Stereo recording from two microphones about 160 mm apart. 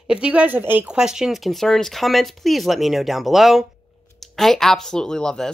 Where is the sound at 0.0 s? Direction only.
5° right (ahead or behind).